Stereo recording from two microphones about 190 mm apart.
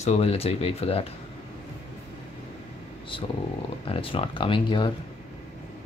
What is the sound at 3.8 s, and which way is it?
Speech, 30° left (ahead or behind).